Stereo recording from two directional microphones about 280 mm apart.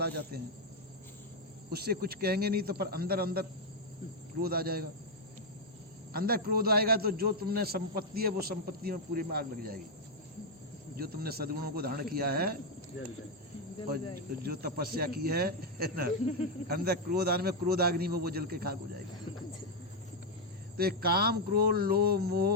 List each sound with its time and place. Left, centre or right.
0.3 s a man's voice: right
1.7 s a man's voice: right
6.1 s a man's voice: right
10.9 s a man's voice: right
13.8 s a man's voice: right
20.7 s a man's voice: right